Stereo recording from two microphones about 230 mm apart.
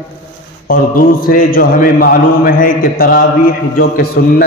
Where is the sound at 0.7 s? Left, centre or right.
Left.